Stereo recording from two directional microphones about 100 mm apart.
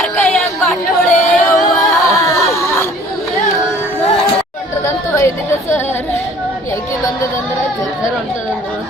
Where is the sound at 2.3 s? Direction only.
25° left (ahead or behind).